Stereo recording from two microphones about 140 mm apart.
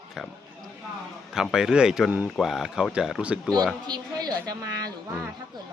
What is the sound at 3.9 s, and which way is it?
A woman's voice, 30° right (ahead or behind).